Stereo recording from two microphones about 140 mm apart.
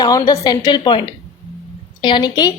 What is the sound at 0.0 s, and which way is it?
A woman's voice, 25° left (ahead or behind).